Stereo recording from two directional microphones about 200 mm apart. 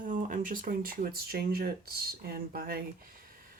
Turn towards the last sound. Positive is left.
turn(degrees=-45)  # may be behind; listen again after turning